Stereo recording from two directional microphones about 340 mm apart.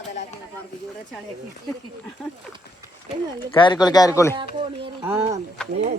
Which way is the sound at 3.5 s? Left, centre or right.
Centre.